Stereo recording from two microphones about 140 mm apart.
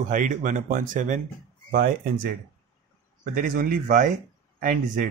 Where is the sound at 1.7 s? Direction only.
90° right.